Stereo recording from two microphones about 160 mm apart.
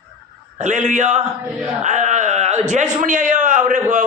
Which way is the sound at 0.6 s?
50° right (ahead or behind).